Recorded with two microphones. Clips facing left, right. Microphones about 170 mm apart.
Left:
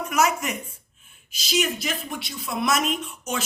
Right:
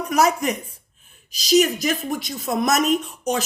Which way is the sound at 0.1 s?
35° right (ahead or behind).